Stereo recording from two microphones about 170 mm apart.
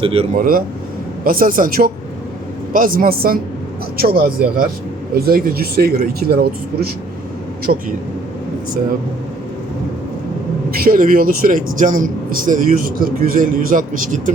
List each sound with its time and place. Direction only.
0.0 s speech: 35° right (ahead or behind)
0.3 s speech: 55° right (ahead or behind)
7.7 s speech: 50° right (ahead or behind)
10.7 s speech: 55° right (ahead or behind)